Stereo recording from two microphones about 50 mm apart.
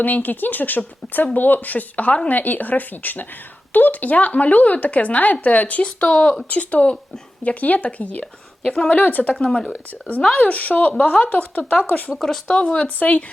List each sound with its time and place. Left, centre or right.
0.0 s speech: left
8.2 s a woman's voice: centre
9.0 s speech: left
9.3 s speech: centre
12.5 s speech: centre